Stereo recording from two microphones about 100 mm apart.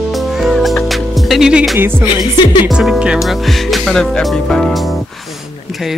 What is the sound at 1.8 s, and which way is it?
Speech, 25° right (ahead or behind).